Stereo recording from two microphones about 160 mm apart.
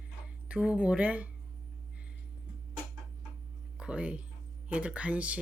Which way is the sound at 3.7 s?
5° right (ahead or behind).